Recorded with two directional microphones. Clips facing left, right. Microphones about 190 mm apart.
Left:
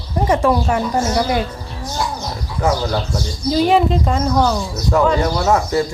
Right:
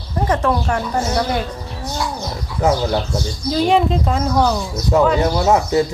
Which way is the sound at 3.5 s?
Centre (ahead or behind).